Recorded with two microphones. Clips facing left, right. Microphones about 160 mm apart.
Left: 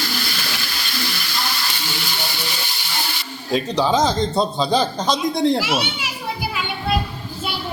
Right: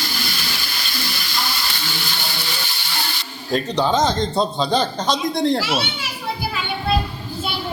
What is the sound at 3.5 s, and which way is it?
A man's voice, centre (ahead or behind).